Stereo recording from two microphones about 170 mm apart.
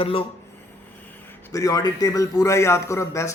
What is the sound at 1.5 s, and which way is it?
A man's voice, 20° left (ahead or behind).